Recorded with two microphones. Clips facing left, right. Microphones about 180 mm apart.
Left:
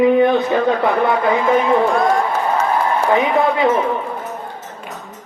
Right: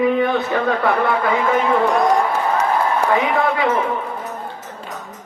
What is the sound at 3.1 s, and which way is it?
Speech, 20° left (ahead or behind).